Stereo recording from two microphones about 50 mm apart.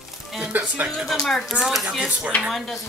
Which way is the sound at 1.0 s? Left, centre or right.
Centre.